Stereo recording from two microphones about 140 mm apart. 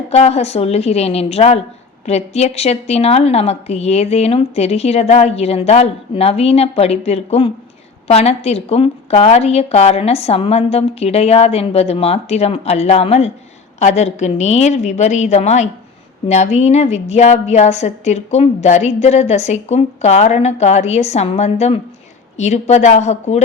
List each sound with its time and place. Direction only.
0.1 s a woman's voice: 50° left (ahead or behind)